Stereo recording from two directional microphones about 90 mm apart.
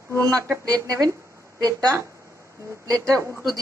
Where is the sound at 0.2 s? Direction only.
40° right (ahead or behind).